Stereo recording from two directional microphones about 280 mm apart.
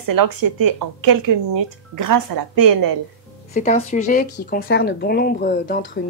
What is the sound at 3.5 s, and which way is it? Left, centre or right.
A woman's voice, left.